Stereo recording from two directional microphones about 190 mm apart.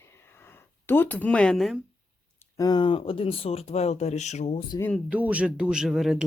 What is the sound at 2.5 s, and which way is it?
Speech, 20° left (ahead or behind).